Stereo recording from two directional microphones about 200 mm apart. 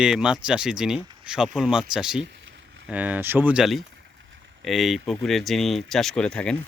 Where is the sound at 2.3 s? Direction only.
65° right (ahead or behind).